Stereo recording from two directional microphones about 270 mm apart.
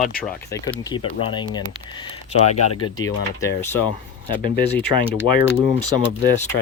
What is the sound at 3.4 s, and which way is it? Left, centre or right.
Speech, centre.